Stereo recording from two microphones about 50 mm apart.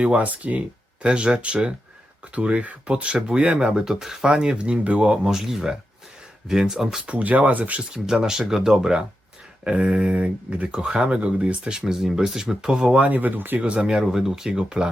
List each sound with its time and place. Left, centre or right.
0.0 s speech: right; by 7.0 s centre
7.0 s speech: right
7.8 s speech: centre
11.8 s speech: centre
13.0 s speech: right
13.6 s speech: right